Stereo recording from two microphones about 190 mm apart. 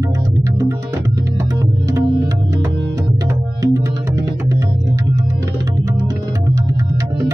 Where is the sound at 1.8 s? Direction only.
15° right (ahead or behind).